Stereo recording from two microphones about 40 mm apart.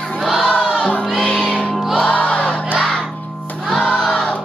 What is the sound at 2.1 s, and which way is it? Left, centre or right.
Crowd, left.